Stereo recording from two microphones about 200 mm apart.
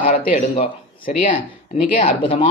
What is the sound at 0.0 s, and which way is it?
Speech, 40° left (ahead or behind).